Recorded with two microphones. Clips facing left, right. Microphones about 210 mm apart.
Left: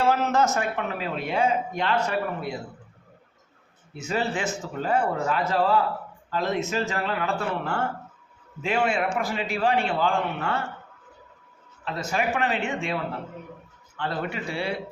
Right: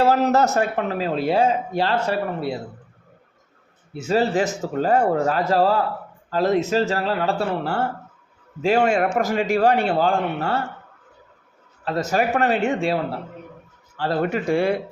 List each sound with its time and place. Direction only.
0.0 s a man's voice: 40° right (ahead or behind)
3.9 s a man's voice: 35° right (ahead or behind)
11.9 s a man's voice: 40° right (ahead or behind)